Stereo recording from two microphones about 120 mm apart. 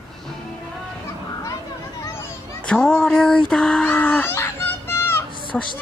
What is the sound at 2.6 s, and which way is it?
Female singing, 5° left (ahead or behind).